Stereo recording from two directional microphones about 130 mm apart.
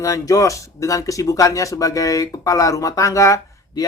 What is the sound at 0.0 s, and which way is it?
Speech, 25° left (ahead or behind).